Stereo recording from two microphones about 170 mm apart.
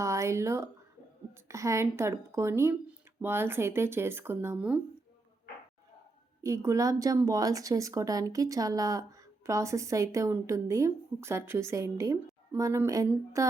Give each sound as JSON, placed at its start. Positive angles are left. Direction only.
{"t": 0.0, "sound": "a woman's voice", "side_deg": -15}
{"t": 6.4, "sound": "a woman's voice", "side_deg": -15}